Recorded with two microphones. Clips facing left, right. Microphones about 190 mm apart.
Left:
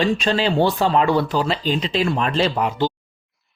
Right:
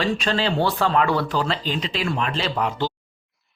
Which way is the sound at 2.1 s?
35° left (ahead or behind).